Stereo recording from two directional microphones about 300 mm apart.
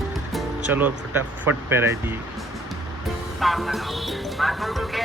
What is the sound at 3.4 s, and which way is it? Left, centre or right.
Speech, centre.